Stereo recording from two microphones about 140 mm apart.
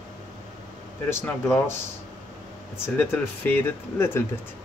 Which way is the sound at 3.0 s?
15° left (ahead or behind).